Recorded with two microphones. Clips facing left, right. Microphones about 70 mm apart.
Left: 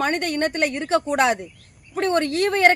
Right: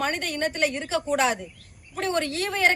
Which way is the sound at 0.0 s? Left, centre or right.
Left.